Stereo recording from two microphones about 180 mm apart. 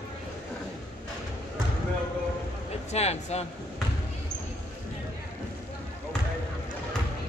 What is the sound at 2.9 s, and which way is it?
Speech, 35° left (ahead or behind).